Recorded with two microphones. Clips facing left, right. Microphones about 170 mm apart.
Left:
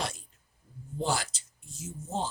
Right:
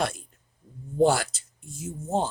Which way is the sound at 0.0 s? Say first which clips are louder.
Right 7 dB; 55° right (ahead or behind).